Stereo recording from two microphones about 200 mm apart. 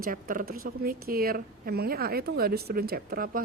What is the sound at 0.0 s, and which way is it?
A woman's voice, 45° right (ahead or behind).